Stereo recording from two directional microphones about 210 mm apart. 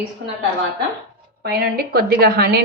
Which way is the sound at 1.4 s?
45° right (ahead or behind).